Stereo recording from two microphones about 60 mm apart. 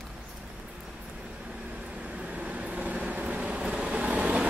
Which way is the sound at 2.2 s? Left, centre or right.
Centre.